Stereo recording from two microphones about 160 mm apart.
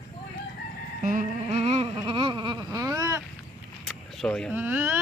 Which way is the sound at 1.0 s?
50° right (ahead or behind).